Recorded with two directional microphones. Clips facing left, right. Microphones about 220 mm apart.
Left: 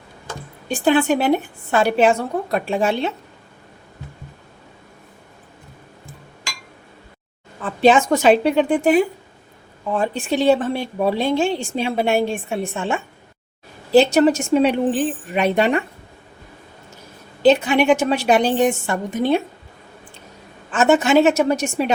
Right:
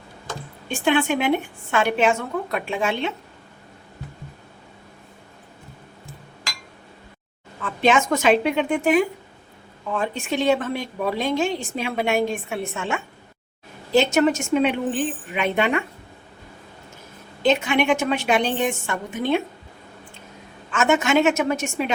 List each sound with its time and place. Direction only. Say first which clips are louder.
0.7 s a woman's voice: left 4 dB; 35° left (ahead or behind)
7.6 s a woman's voice: left 5 dB; 35° left (ahead or behind)
17.4 s a woman's voice: left 5 dB; 35° left (ahead or behind)
20.7 s a woman's voice: left 4 dB; 35° left (ahead or behind)